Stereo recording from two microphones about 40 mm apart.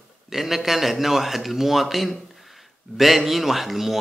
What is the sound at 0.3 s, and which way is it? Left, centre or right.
A man's voice, centre.